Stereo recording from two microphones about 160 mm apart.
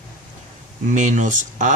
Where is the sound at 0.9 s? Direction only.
50° right (ahead or behind).